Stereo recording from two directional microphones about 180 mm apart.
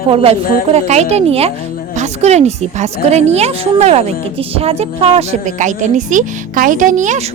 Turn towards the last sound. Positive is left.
turn(degrees=-45)  # may be behind; listen again after turning